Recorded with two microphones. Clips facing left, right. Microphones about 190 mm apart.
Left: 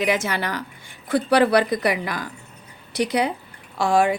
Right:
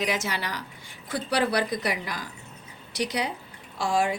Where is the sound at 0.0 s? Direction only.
55° left (ahead or behind).